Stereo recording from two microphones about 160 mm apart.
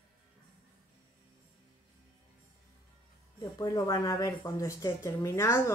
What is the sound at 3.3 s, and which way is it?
Speech, 25° left (ahead or behind).